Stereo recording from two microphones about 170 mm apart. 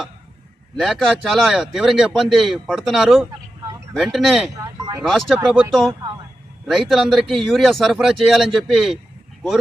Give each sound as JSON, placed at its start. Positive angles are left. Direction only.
{"t": 0.8, "sound": "a man's voice", "side_deg": 0}
{"t": 4.5, "sound": "a sound", "side_deg": -20}
{"t": 5.0, "sound": "a man's voice", "side_deg": 0}
{"t": 6.7, "sound": "a man's voice", "side_deg": 0}